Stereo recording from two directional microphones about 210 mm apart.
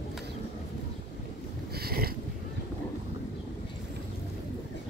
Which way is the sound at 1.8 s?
45° right (ahead or behind).